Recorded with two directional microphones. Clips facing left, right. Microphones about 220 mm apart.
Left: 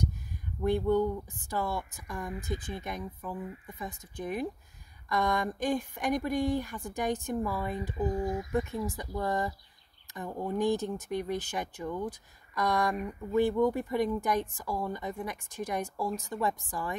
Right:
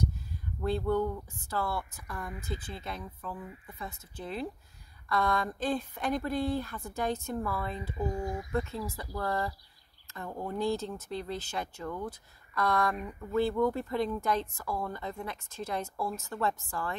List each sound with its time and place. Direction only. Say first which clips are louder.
0.6 s speech: left 3 dB; 15° left (ahead or behind)
8.1 s speech: left 3 dB; centre (ahead or behind)
8.5 s speech: left 2 dB; 15° left (ahead or behind)